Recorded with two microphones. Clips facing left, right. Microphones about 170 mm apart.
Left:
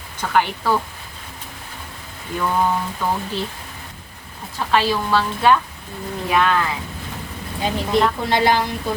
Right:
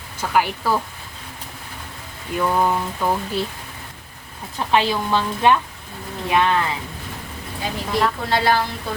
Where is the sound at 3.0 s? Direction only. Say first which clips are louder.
Right 2 dB; 10° right (ahead or behind).